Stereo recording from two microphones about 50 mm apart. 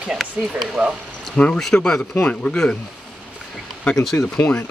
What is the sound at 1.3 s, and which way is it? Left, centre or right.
Speech, left.